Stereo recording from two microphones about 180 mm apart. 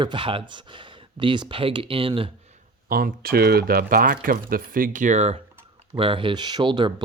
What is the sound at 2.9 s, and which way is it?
Speech, 55° right (ahead or behind).